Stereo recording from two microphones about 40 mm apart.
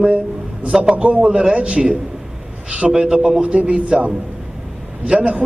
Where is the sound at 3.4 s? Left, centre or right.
Right.